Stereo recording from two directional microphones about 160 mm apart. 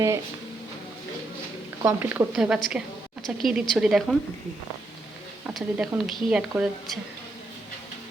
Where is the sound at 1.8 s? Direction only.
15° right (ahead or behind).